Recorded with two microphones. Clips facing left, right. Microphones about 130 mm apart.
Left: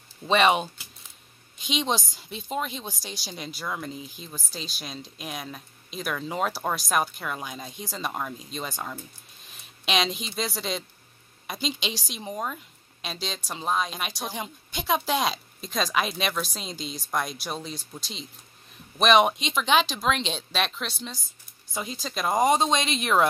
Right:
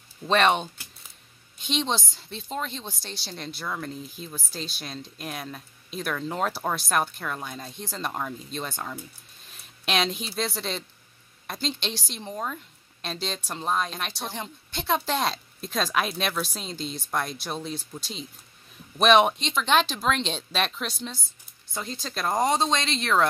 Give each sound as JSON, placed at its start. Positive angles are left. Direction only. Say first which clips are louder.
{"t": 0.3, "sound": "a woman's voice", "louder": "left 1 dB", "side_deg": 5}
{"t": 22.4, "sound": "a woman's voice", "louder": "left 2 dB", "side_deg": 15}